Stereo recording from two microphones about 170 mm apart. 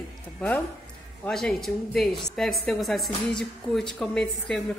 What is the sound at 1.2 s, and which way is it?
A woman's voice, 5° left (ahead or behind).